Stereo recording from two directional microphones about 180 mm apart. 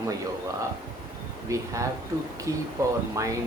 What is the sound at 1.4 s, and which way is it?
Speech, 15° right (ahead or behind).